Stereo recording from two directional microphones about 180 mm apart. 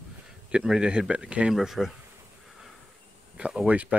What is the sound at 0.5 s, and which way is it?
Speech, 5° right (ahead or behind).